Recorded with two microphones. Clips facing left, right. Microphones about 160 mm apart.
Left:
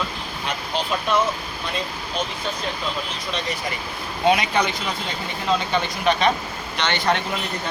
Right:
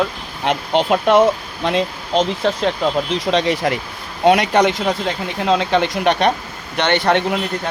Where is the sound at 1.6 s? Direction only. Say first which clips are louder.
Right 11 dB; 90° right.